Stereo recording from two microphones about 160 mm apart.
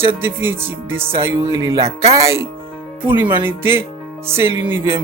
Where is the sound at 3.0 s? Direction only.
10° right (ahead or behind).